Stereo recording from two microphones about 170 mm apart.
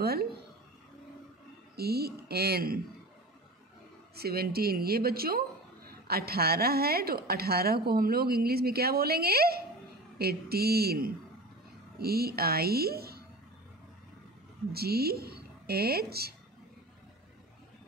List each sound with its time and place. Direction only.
0.0 s a woman's voice: 65° right (ahead or behind)
1.8 s speech: 65° right (ahead or behind)
4.1 s a woman's voice: 65° right (ahead or behind)
14.7 s speech: 65° right (ahead or behind)